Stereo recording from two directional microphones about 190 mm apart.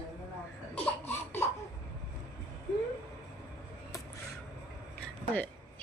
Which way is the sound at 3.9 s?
15° left (ahead or behind).